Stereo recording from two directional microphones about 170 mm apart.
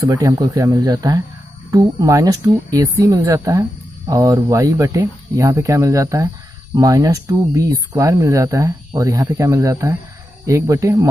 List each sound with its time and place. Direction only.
0.0 s speech: 20° right (ahead or behind)